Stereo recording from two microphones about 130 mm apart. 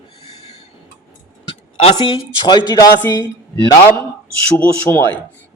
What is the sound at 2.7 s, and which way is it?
Speech, 30° left (ahead or behind).